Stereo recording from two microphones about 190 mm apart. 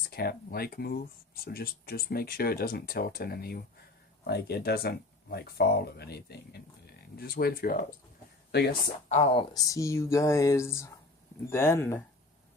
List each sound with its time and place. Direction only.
0.1 s speech: 55° left (ahead or behind)
8.5 s speech: 60° left (ahead or behind)
9.0 s speech: 35° left (ahead or behind)
9.6 s speech: 15° left (ahead or behind)